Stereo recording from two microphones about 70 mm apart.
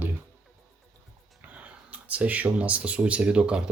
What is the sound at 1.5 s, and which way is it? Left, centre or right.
Speech, right.